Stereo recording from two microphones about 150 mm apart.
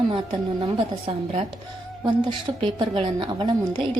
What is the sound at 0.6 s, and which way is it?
Speech, 35° right (ahead or behind).